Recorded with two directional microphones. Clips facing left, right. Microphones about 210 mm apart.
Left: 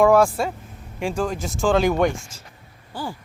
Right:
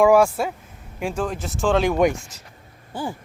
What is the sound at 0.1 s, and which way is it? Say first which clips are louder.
Speech: right 1 dB; 5° right (ahead or behind).